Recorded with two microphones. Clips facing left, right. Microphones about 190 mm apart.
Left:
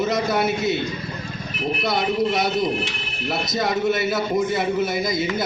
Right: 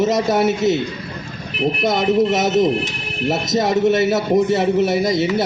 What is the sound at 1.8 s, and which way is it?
A man's voice, 45° right (ahead or behind).